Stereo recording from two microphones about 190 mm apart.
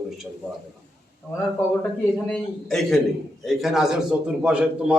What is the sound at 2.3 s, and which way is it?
A man's voice, 5° left (ahead or behind).